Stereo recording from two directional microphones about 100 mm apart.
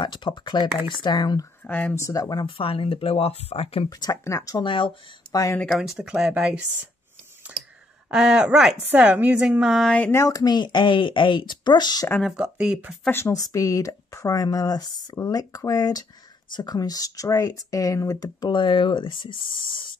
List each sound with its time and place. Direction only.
0.0 s speech: 50° left (ahead or behind)
1.7 s speech: 15° left (ahead or behind)
2.0 s speech: 35° left (ahead or behind); by 3.9 s 80° left
4.2 s speech: 30° left (ahead or behind)
4.6 s speech: 60° left (ahead or behind)
5.3 s speech: 35° left (ahead or behind)
5.7 s speech: 5° right (ahead or behind)
8.1 s speech: 10° right (ahead or behind)
10.1 s speech: 35° left (ahead or behind)
12.2 s speech: 5° right (ahead or behind)
13.1 s speech: 30° left (ahead or behind)
18.5 s speech: 55° left (ahead or behind)